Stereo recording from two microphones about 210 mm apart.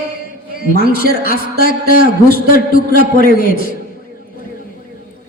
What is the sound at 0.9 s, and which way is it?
A man's voice, 40° left (ahead or behind).